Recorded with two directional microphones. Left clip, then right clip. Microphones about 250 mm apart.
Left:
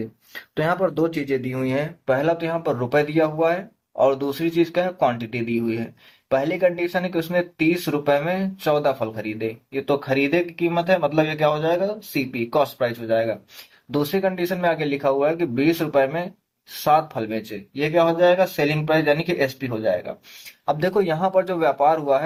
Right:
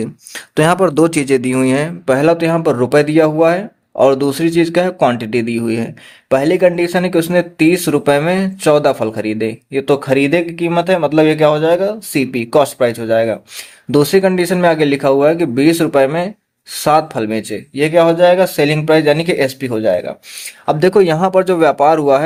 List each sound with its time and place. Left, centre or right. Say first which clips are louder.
0.5 s speech: right 10 dB; right